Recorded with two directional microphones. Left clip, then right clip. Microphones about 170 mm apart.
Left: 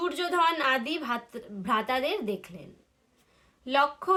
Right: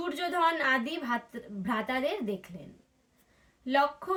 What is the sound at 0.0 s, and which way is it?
A woman's voice, 20° left (ahead or behind).